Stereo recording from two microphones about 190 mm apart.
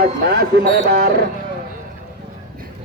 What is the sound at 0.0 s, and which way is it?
Speech, 55° right (ahead or behind).